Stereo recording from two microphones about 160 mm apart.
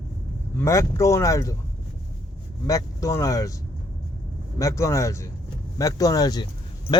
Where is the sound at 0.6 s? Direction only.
20° left (ahead or behind).